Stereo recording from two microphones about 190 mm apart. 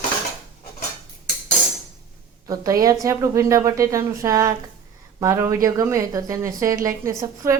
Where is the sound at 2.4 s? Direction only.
20° right (ahead or behind).